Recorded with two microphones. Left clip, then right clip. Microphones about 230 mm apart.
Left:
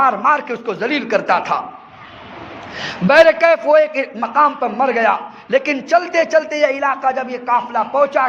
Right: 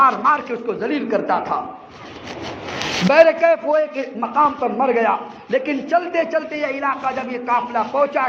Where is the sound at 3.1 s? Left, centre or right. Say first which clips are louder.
Left 3 dB; left.